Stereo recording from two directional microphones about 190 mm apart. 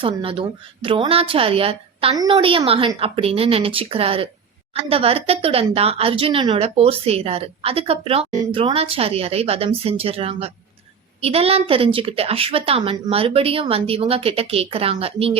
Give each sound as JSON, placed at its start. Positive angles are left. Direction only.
{"t": 0.0, "sound": "a woman's voice", "side_deg": -30}